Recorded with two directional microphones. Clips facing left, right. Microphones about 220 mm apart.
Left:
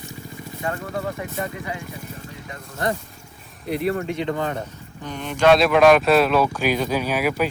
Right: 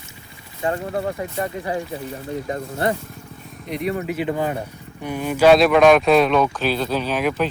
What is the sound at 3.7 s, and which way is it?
Speech, centre (ahead or behind).